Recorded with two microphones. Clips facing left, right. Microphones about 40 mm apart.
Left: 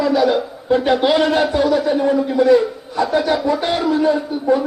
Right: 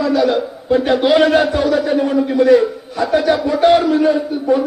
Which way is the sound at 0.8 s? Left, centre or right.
Centre.